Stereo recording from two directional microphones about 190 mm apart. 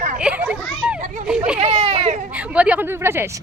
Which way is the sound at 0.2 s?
5° right (ahead or behind).